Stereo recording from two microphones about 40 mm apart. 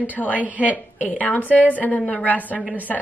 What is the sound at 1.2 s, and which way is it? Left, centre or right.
A woman's voice, left.